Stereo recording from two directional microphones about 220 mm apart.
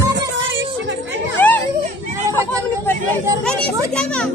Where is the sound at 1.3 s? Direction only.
10° left (ahead or behind).